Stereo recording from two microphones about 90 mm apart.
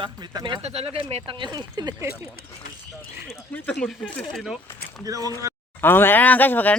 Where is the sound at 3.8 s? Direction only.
5° left (ahead or behind).